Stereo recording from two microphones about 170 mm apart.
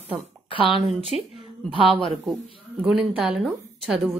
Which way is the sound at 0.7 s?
Centre (ahead or behind).